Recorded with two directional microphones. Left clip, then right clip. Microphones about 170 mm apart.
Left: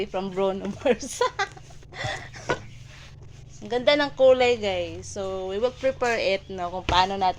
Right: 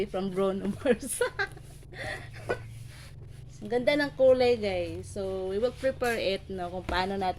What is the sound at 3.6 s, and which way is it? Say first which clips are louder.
A woman's voice: left 5 dB; 25° right (ahead or behind).